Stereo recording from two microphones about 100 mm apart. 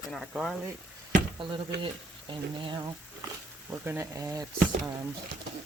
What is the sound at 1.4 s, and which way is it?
Speech, 55° right (ahead or behind).